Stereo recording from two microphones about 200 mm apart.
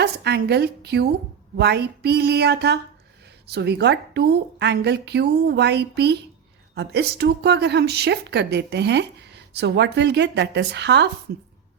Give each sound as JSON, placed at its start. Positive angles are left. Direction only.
{"t": 0.0, "sound": "a woman's voice", "side_deg": -55}